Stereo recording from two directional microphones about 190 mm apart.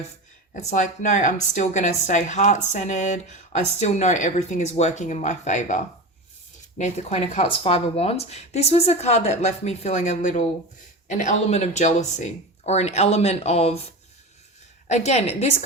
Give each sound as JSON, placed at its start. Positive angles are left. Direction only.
{"t": 0.5, "sound": "speech", "side_deg": 35}
{"t": 14.8, "sound": "speech", "side_deg": 35}